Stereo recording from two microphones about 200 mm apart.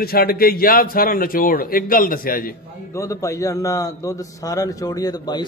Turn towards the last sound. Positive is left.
turn(degrees=20)  # may be behind; listen again after turning